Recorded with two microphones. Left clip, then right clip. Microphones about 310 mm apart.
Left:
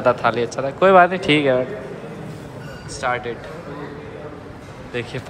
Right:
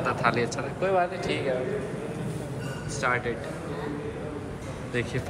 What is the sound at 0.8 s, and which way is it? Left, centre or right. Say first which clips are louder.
Speech: left 13 dB; left.